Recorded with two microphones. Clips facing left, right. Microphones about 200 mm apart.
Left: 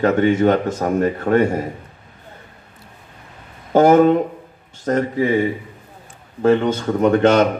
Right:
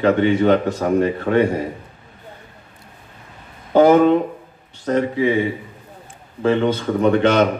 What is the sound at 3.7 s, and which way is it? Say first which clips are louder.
A man's voice: even; 45° left (ahead or behind).